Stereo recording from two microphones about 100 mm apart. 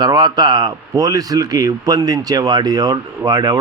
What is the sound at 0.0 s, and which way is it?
A man's voice, 45° right (ahead or behind).